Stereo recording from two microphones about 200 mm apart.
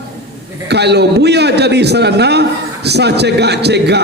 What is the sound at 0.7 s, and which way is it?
A man's voice, 55° right (ahead or behind).